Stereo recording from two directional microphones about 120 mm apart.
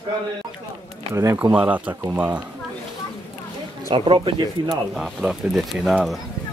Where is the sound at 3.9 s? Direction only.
45° right (ahead or behind).